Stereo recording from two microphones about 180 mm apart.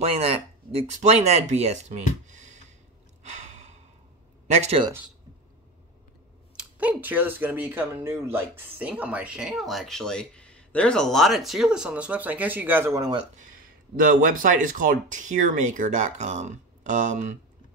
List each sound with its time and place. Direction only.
0.0 s speech: 35° right (ahead or behind)
2.2 s a sound: 40° right (ahead or behind)
3.3 s gasp: 40° right (ahead or behind)
4.5 s speech: 35° right (ahead or behind)
6.5 s speech: 5° right (ahead or behind)
14.3 s speech: 50° right (ahead or behind)